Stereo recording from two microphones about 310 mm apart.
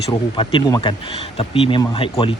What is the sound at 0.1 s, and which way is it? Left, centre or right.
Speech, centre.